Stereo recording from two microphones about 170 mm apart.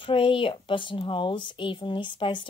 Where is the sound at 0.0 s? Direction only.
30° left (ahead or behind).